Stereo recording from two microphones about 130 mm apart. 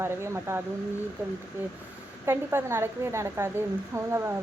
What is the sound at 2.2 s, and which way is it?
A woman's voice, 20° right (ahead or behind).